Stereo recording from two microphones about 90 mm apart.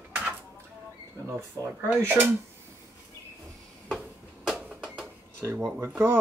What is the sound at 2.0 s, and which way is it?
Speech, 25° right (ahead or behind).